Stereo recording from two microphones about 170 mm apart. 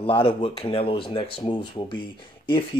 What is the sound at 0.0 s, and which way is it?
Speech, 30° left (ahead or behind).